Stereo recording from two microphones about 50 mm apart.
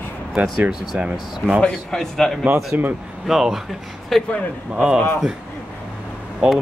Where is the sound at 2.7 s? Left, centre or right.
Right.